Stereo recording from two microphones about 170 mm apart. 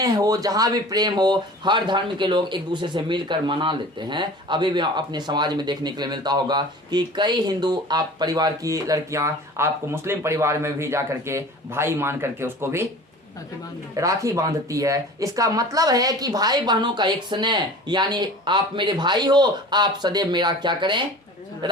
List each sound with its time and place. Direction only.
0.0 s speech: 20° right (ahead or behind)
13.9 s speech: 20° right (ahead or behind)